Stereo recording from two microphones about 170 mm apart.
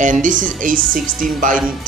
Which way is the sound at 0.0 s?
50° right (ahead or behind).